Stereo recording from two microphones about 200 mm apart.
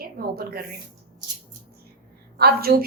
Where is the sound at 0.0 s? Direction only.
50° right (ahead or behind).